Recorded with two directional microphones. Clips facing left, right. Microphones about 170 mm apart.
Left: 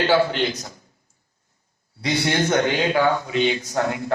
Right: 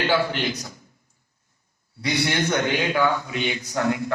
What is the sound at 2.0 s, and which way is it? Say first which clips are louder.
Speech: left 2 dB; 25° left (ahead or behind).